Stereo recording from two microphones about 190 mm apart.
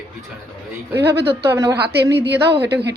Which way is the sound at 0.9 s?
60° right (ahead or behind).